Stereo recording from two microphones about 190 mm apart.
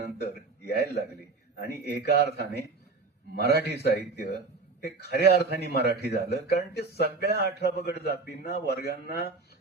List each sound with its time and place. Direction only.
0.2 s a man's voice: 60° left (ahead or behind)
7.0 s a man's voice: 60° right (ahead or behind)
7.6 s a man's voice: 60° left (ahead or behind)